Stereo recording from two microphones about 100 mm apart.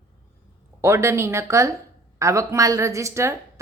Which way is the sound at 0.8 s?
25° right (ahead or behind).